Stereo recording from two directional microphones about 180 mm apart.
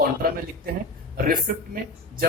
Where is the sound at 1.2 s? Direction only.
55° right (ahead or behind).